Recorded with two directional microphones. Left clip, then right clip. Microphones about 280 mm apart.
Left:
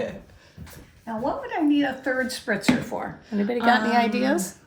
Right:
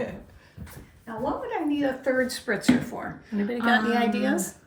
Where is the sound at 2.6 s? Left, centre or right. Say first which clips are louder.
Left 1 dB; centre.